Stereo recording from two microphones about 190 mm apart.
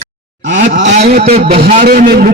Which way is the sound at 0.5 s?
40° right (ahead or behind).